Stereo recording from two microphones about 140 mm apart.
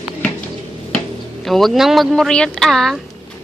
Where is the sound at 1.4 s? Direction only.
Centre (ahead or behind).